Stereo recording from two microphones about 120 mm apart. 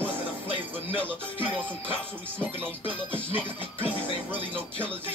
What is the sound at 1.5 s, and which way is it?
Speech, 15° right (ahead or behind).